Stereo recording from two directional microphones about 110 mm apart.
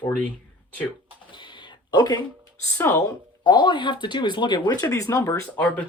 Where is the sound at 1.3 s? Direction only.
45° left (ahead or behind); by 3.0 s 25° left (ahead or behind).